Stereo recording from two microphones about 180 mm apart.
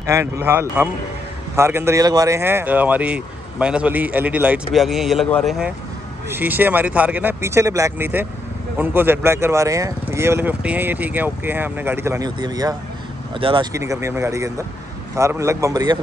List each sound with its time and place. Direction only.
0.0 s speech: 15° right (ahead or behind)
6.2 s speech: 10° right (ahead or behind); by 13.7 s 30° right (ahead or behind)
13.7 s speech: 15° right (ahead or behind)